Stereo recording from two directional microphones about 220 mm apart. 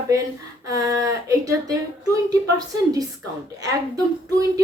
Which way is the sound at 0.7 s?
15° right (ahead or behind).